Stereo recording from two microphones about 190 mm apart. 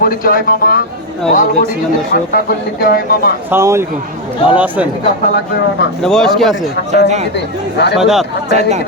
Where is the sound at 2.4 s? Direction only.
55° left (ahead or behind).